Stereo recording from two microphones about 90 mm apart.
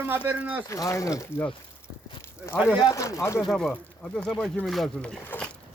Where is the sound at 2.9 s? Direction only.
35° left (ahead or behind).